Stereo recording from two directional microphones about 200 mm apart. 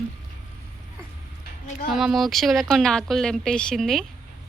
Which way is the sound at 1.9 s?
Centre (ahead or behind).